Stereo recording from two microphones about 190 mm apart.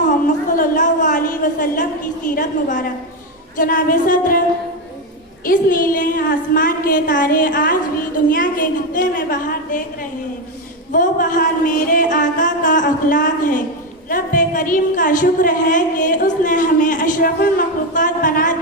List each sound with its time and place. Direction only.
0.6 s a sound: 45° left (ahead or behind)
3.6 s a woman's voice: 45° left (ahead or behind)
5.5 s a woman's voice: 45° left (ahead or behind)